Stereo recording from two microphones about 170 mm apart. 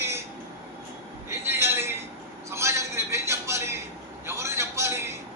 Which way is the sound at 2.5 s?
15° right (ahead or behind).